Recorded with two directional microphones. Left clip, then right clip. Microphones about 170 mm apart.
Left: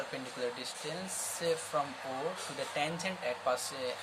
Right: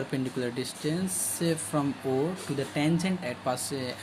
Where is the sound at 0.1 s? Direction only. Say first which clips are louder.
Right 6 dB; 40° right (ahead or behind).